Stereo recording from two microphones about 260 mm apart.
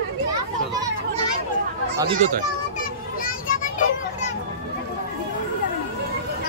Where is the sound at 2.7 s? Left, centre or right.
Left.